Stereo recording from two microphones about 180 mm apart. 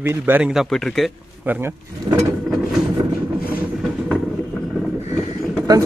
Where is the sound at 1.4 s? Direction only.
10° right (ahead or behind).